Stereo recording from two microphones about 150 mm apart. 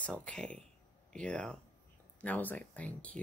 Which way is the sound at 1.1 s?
5° left (ahead or behind).